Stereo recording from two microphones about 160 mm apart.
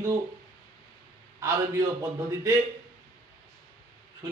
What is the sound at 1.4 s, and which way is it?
A man's voice, 20° right (ahead or behind).